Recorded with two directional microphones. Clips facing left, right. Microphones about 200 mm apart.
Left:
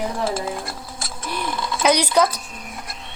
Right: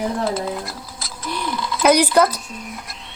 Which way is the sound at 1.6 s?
50° left (ahead or behind).